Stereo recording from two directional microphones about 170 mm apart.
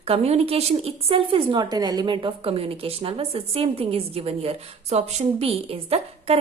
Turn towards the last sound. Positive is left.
turn(degrees=-35)  # may be behind; listen again after turning